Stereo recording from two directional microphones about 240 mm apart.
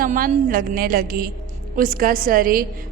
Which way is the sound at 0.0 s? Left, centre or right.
Right.